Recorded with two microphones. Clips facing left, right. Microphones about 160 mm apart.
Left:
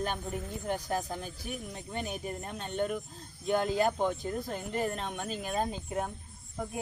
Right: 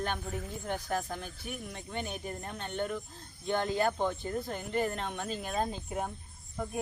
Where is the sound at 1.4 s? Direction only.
35° left (ahead or behind).